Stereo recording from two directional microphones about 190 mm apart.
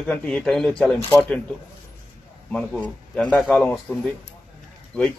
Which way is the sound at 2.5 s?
5° left (ahead or behind).